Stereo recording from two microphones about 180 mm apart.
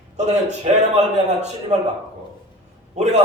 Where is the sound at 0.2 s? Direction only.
40° right (ahead or behind).